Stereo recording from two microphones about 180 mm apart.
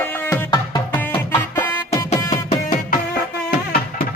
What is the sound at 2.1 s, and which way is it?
Music, 40° left (ahead or behind).